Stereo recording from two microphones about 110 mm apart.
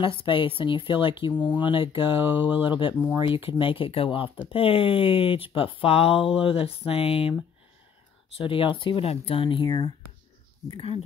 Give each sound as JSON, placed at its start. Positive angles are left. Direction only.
{"t": 0.2, "sound": "speech", "side_deg": 50}
{"t": 8.4, "sound": "speech", "side_deg": 55}